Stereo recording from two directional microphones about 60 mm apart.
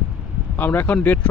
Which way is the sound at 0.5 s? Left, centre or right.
Left.